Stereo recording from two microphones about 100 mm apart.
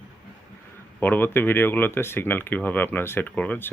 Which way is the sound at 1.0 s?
20° left (ahead or behind).